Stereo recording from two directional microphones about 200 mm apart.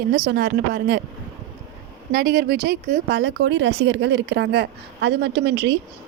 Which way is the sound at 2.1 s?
55° right (ahead or behind).